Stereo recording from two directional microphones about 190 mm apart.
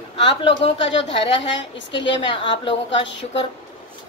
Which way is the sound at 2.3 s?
25° left (ahead or behind).